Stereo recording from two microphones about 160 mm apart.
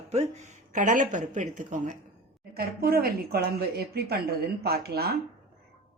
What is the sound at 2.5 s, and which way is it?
Speech, 70° right (ahead or behind).